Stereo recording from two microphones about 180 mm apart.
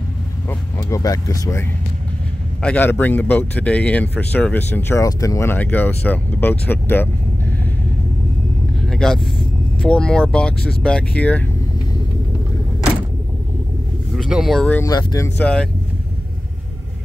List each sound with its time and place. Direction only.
0.5 s speech: 15° left (ahead or behind)
8.8 s speech: centre (ahead or behind)
14.1 s speech: centre (ahead or behind)
14.8 s speech: 20° left (ahead or behind); by 15.7 s 5° left (ahead or behind)